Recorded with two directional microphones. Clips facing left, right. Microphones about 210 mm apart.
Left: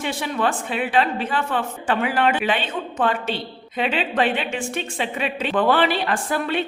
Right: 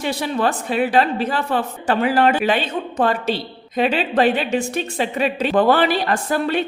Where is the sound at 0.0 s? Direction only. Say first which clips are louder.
Right 3 dB; 40° right (ahead or behind).